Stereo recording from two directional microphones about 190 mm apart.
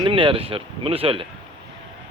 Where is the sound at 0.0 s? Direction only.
25° right (ahead or behind).